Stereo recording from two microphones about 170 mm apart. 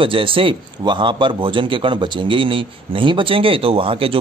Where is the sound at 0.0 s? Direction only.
30° right (ahead or behind).